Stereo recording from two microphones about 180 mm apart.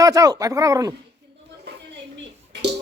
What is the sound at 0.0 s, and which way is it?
Speech, 20° right (ahead or behind).